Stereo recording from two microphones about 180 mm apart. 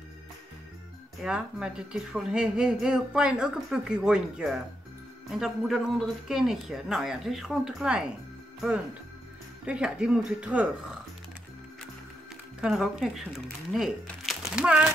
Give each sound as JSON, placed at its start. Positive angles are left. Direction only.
{"t": 1.2, "sound": "a woman's voice", "side_deg": -5}
{"t": 9.7, "sound": "a woman's voice", "side_deg": -5}
{"t": 12.5, "sound": "speech", "side_deg": -5}